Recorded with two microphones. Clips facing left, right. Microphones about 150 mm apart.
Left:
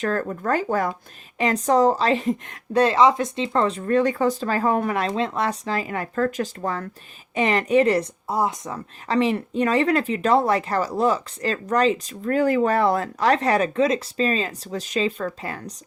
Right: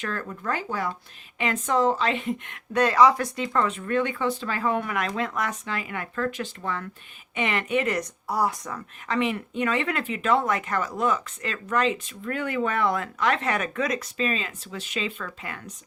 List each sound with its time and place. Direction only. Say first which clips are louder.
0.0 s speech: left 7 dB; 40° left (ahead or behind)